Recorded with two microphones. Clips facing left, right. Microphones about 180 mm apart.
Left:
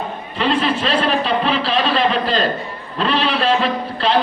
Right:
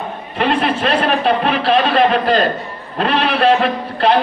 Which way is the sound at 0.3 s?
55° right (ahead or behind).